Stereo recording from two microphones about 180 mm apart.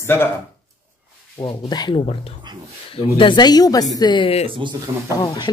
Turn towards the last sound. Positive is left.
turn(degrees=20)  # may be behind; listen again after turning